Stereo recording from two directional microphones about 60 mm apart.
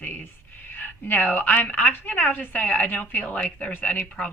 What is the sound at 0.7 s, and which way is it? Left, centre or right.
A woman's voice, left.